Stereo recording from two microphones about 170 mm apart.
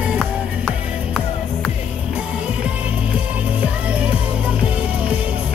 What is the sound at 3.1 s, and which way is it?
Music, 5° right (ahead or behind).